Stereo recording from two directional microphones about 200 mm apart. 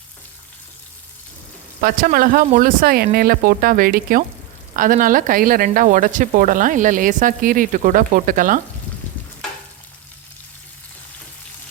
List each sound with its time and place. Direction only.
1.8 s speech: 45° right (ahead or behind)